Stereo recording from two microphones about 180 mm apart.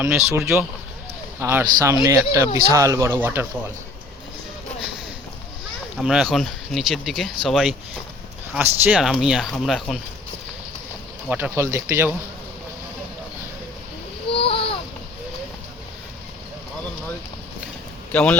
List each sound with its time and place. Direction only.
0.0 s speech: 15° right (ahead or behind)
6.0 s speech: centre (ahead or behind)
11.3 s speech: 10° right (ahead or behind)
14.3 s a sound: 30° left (ahead or behind)
18.1 s speech: 5° left (ahead or behind)